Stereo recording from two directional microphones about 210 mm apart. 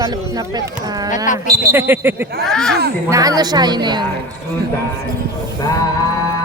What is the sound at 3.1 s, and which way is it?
Speech, 15° right (ahead or behind).